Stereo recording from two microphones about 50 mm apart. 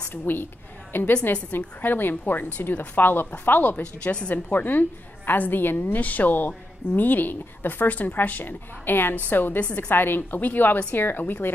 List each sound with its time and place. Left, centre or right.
0.1 s a woman's voice: left